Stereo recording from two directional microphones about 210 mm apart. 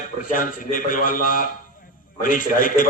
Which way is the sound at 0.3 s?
40° left (ahead or behind).